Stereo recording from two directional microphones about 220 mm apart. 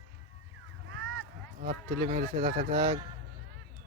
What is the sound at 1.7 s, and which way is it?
Speech, 35° right (ahead or behind).